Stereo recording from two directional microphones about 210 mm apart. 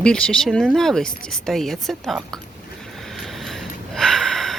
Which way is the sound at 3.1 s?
Centre (ahead or behind).